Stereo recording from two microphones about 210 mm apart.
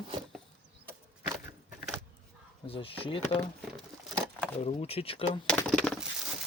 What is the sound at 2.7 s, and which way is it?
Speech, 25° left (ahead or behind).